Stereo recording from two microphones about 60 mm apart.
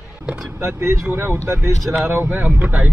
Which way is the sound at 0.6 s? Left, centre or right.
Right.